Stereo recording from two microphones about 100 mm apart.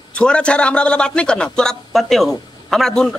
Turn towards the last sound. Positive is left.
turn(degrees=5)  # may be behind; listen again after turning